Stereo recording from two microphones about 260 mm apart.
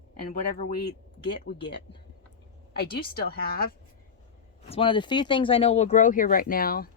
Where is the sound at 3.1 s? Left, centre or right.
Left.